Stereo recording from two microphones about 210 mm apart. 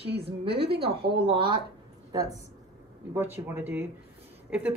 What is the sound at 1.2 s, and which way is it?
Speech, 25° right (ahead or behind).